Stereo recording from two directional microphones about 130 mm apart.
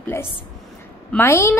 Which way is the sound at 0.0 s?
20° left (ahead or behind).